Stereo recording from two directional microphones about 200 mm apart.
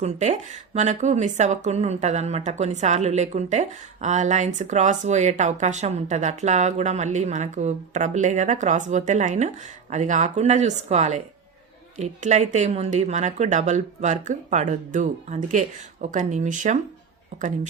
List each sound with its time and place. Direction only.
0.0 s speech: 35° right (ahead or behind)